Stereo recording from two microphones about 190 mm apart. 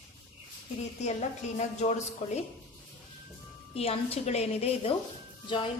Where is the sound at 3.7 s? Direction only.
30° left (ahead or behind).